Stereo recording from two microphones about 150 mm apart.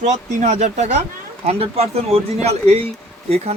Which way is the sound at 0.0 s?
50° right (ahead or behind).